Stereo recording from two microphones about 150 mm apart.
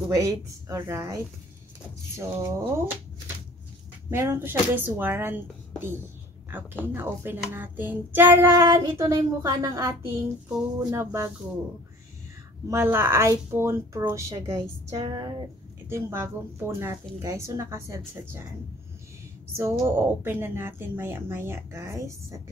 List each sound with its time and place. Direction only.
0.1 s speech: 25° right (ahead or behind)
4.1 s speech: 15° right (ahead or behind)
6.5 s speech: 15° right (ahead or behind)
12.6 s speech: 15° right (ahead or behind)
15.9 s speech: 15° right (ahead or behind)
19.5 s speech: 20° right (ahead or behind)